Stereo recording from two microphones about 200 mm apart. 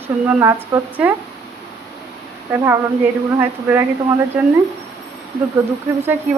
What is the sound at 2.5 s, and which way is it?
A woman's voice, 10° right (ahead or behind).